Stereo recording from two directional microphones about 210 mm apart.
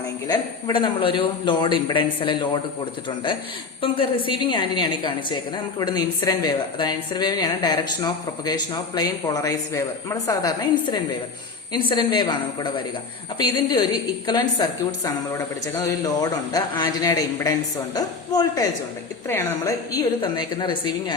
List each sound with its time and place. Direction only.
0.3 s a woman's voice: 25° left (ahead or behind)
3.8 s a woman's voice: 25° left (ahead or behind)